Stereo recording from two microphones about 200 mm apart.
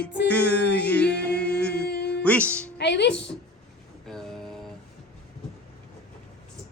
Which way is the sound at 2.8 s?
60° left (ahead or behind).